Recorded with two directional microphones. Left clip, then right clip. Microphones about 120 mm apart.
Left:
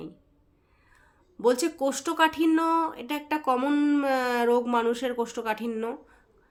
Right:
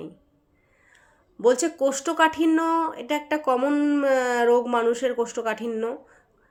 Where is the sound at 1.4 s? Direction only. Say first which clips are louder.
Right 4 dB; 25° left (ahead or behind).